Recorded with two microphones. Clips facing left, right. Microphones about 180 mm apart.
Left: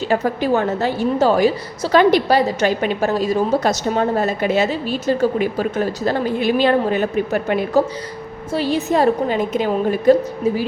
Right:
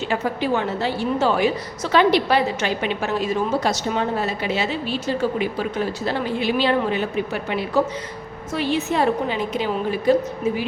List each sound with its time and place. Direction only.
0.1 s a woman's voice: 40° left (ahead or behind)
8.5 s a woman's voice: 40° left (ahead or behind)